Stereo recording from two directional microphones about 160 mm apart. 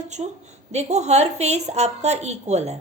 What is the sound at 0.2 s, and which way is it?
Speech, 30° right (ahead or behind).